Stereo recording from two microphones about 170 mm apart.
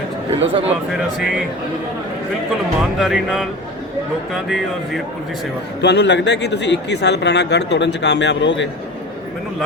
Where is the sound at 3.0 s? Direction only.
5° right (ahead or behind).